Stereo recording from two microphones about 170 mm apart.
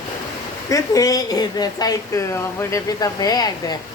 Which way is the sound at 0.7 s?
20° left (ahead or behind).